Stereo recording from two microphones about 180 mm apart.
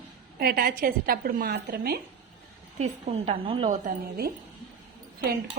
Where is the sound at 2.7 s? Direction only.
40° right (ahead or behind).